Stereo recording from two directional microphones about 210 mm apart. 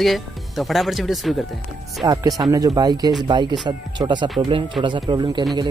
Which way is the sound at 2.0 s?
15° right (ahead or behind).